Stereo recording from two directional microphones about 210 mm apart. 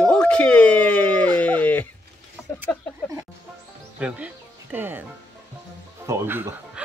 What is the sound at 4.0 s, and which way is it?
Speech, 5° right (ahead or behind).